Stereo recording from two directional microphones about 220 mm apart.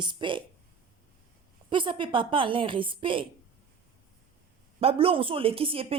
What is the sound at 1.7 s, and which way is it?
A woman's voice, 20° right (ahead or behind).